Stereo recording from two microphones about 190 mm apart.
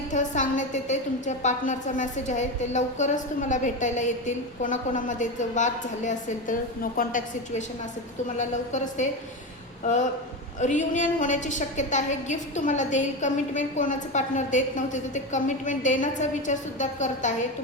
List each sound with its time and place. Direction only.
0.1 s a woman's voice: 40° left (ahead or behind)